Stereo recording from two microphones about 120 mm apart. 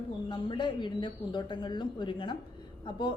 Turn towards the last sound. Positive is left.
turn(degrees=40)  # may be behind; listen again after turning